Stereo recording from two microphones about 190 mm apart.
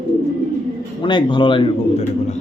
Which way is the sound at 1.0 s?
25° left (ahead or behind).